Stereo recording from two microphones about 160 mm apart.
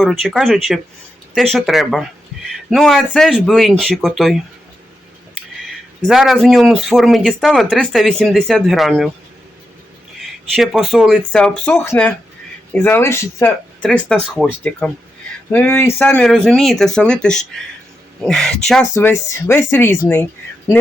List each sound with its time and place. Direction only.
0.0 s speech: centre (ahead or behind)
5.6 s speech: centre (ahead or behind)
10.2 s speech: centre (ahead or behind)
18.9 s speech: 15° left (ahead or behind)